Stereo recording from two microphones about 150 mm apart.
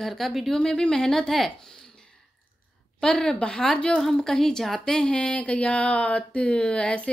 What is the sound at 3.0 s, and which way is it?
A woman's voice, 5° left (ahead or behind).